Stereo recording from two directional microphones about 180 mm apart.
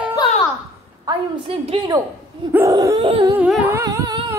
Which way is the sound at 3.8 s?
20° right (ahead or behind).